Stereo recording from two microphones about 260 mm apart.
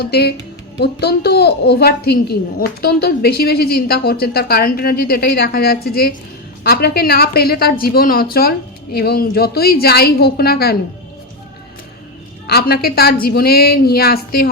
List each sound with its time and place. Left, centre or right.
0.0 s a woman's voice: left
12.5 s a woman's voice: left